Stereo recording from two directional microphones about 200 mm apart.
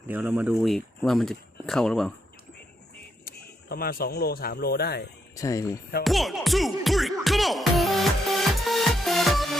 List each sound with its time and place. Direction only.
0.1 s speech: 10° right (ahead or behind)
3.2 s speech: 50° left (ahead or behind)
5.4 s speech: 15° left (ahead or behind)
6.0 s music: centre (ahead or behind)